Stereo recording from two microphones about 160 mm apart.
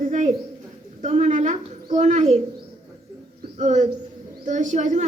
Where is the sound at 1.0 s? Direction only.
50° right (ahead or behind).